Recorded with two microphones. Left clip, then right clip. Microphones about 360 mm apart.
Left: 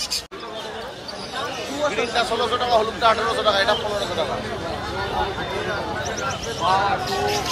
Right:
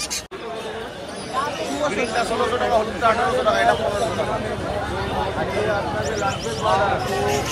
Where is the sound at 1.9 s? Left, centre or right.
Left.